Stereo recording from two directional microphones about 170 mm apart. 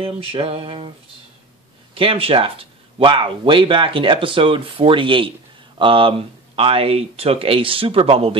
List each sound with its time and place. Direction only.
0.0 s speech: 35° right (ahead or behind)
2.0 s speech: 30° right (ahead or behind)